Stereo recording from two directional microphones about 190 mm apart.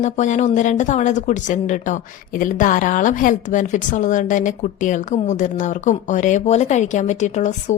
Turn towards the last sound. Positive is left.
turn(degrees=40)  # may be behind; listen again after turning